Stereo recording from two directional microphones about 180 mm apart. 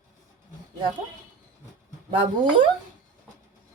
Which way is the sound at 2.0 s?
30° right (ahead or behind).